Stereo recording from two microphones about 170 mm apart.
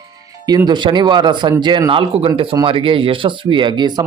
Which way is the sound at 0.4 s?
25° right (ahead or behind).